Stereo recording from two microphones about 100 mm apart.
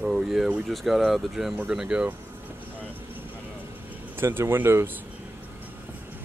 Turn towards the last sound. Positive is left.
turn(degrees=-20)  # may be behind; listen again after turning